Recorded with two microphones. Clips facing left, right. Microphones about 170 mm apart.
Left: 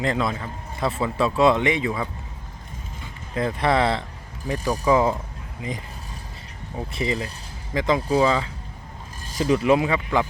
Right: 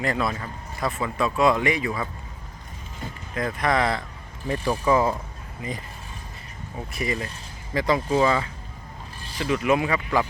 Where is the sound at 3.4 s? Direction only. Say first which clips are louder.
Left 2 dB; 25° left (ahead or behind).